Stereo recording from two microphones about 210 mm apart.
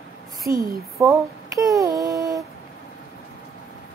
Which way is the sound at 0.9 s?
15° right (ahead or behind).